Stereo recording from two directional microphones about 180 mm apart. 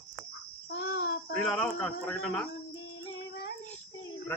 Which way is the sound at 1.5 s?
5° left (ahead or behind).